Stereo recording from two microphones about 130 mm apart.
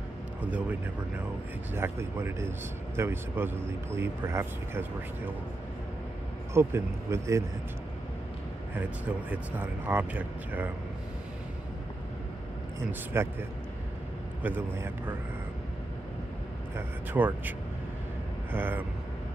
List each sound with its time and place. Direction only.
0.4 s a man's voice: 10° right (ahead or behind)
6.5 s a man's voice: 20° right (ahead or behind)
9.3 s speech: 15° right (ahead or behind)
13.1 s a man's voice: 20° right (ahead or behind)
16.7 s speech: 15° right (ahead or behind)